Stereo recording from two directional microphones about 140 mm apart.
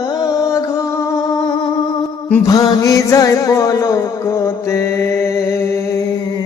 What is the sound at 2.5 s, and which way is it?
Music, 25° left (ahead or behind).